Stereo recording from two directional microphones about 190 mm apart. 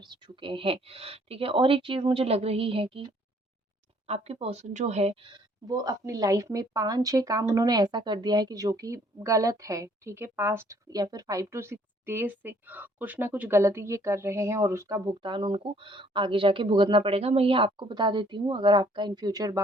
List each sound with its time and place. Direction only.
0.0 s a woman's voice: 25° right (ahead or behind)
4.0 s a woman's voice: 30° right (ahead or behind)